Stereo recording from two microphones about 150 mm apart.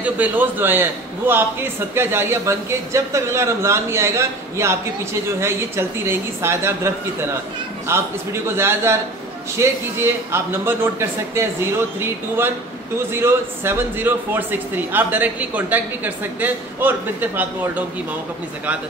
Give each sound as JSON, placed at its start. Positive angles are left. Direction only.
{"t": 0.0, "sound": "a man's voice", "side_deg": -10}
{"t": 7.9, "sound": "a man's voice", "side_deg": -15}
{"t": 13.1, "sound": "a man's voice", "side_deg": -15}